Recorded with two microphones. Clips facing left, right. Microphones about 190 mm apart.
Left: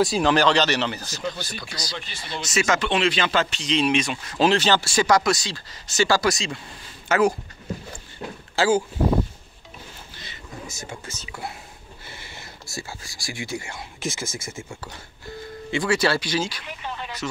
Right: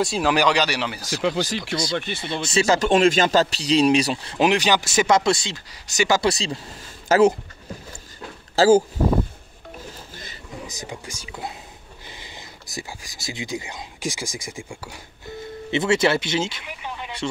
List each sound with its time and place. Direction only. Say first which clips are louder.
0.0 s speech: left 2 dB; centre (ahead or behind)
0.3 s speech: right 2 dB; 10° right (ahead or behind)
1.2 s speech: right 9 dB; 90° right
1.9 s speech: right 10 dB; 55° right (ahead or behind)
2.4 s speech: right 3 dB; 30° right (ahead or behind)
4.4 s speech: even; 15° right (ahead or behind)
6.2 s speech: right 2 dB; 35° right (ahead or behind)
8.5 s speech: right 6 dB; 40° right (ahead or behind)
10.7 s speech: right 2 dB; 15° right (ahead or behind)
16.6 s a sound: even; 10° right (ahead or behind)